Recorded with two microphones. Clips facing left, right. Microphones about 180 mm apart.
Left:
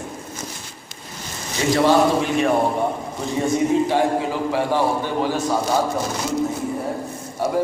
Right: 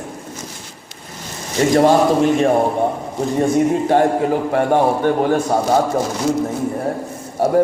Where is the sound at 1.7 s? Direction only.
45° right (ahead or behind).